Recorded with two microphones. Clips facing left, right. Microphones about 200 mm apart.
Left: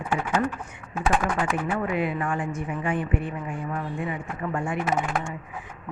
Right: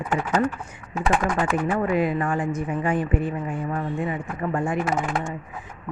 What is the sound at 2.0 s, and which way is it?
A woman's voice, 40° right (ahead or behind).